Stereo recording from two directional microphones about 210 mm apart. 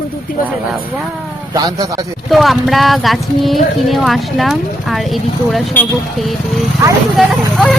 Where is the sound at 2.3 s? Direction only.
Centre (ahead or behind).